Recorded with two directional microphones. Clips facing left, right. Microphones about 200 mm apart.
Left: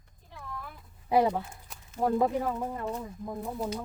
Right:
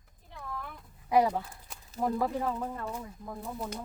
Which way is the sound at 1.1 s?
25° left (ahead or behind).